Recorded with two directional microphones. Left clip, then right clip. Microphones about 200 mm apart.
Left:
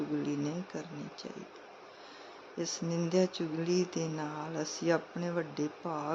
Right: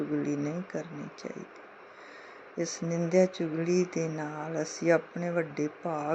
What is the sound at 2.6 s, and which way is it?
Mantra, 10° right (ahead or behind).